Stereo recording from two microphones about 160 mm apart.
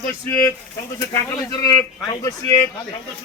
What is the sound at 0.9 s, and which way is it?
Speech, 20° left (ahead or behind).